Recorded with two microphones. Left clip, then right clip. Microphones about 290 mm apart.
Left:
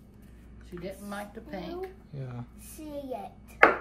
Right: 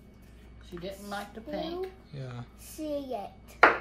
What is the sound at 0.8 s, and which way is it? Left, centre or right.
Speech, centre.